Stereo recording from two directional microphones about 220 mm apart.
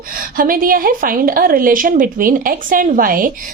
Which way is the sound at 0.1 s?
40° right (ahead or behind).